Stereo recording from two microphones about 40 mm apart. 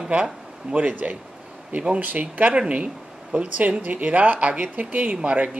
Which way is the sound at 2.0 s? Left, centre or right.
Right.